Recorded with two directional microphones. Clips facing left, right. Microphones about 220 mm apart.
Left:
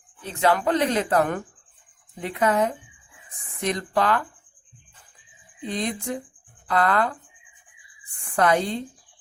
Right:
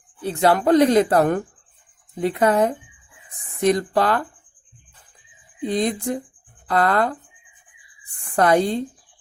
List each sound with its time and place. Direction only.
0.2 s speech: 35° right (ahead or behind)
5.6 s speech: 40° right (ahead or behind)
8.4 s speech: 40° right (ahead or behind)